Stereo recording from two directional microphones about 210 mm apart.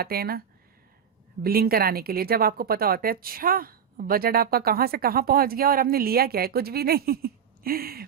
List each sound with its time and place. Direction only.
0.0 s a woman's voice: 45° right (ahead or behind)